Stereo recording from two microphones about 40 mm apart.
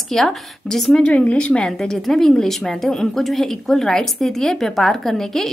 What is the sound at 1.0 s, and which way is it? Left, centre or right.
Speech, left.